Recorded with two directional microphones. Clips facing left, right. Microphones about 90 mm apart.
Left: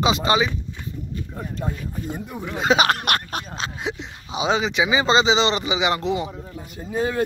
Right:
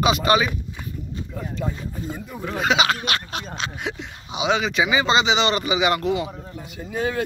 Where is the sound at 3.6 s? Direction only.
25° left (ahead or behind).